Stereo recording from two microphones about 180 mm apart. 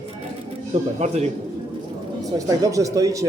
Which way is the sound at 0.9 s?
40° right (ahead or behind).